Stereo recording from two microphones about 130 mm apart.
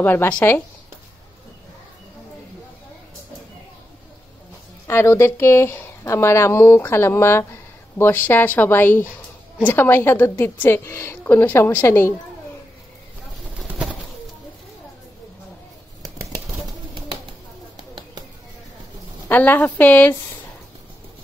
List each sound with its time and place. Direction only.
0.0 s a woman's voice: 15° left (ahead or behind)
4.8 s a woman's voice: 20° left (ahead or behind)
13.6 s bird: 10° right (ahead or behind)
19.2 s a woman's voice: 15° left (ahead or behind)